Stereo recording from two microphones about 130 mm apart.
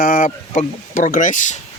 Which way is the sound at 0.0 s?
90° left.